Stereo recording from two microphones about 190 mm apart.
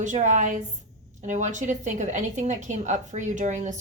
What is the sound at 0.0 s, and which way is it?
A woman's voice, 40° right (ahead or behind).